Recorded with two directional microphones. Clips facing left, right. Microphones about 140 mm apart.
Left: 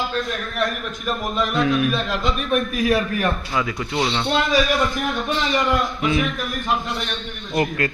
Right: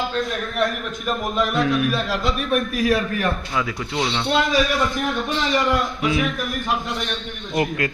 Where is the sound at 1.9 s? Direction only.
5° right (ahead or behind).